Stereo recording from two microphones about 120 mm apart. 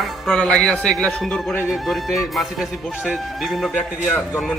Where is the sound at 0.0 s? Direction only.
5° left (ahead or behind).